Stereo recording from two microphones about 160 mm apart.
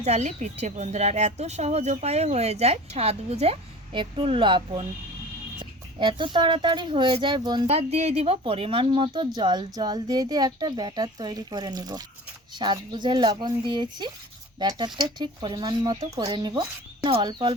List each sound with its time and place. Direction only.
0.0 s speech: 45° right (ahead or behind); by 7.7 s 25° right (ahead or behind)
7.7 s speech: 40° right (ahead or behind)